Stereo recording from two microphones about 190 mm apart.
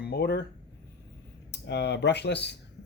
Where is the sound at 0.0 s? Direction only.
60° left (ahead or behind).